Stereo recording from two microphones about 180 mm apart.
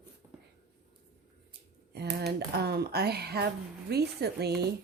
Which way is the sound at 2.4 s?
65° right (ahead or behind).